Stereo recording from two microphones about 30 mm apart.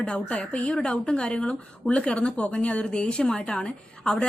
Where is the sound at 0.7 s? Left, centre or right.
Left.